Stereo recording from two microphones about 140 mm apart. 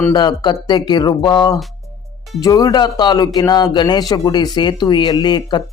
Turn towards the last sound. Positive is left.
turn(degrees=30)  # may be behind; listen again after turning